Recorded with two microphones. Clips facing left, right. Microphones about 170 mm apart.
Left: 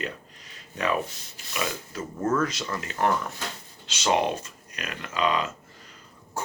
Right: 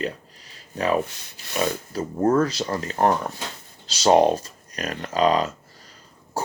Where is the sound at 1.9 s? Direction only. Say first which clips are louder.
Right 6 dB; 35° right (ahead or behind).